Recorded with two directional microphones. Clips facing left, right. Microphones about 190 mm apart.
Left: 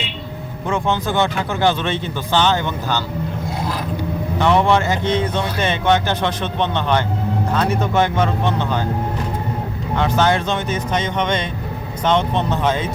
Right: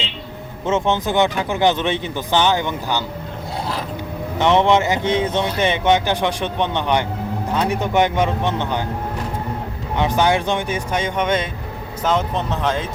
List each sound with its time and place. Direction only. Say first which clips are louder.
0.7 s a man's voice: right 1 dB; 20° right (ahead or behind)
4.4 s a man's voice: right 1 dB; 20° right (ahead or behind)
9.9 s a man's voice: even; 15° right (ahead or behind); by 12.9 s centre (ahead or behind)